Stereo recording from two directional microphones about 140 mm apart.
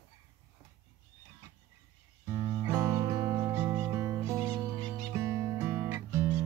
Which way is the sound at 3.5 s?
15° right (ahead or behind).